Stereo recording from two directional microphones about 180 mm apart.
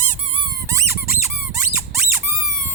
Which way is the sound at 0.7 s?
15° right (ahead or behind).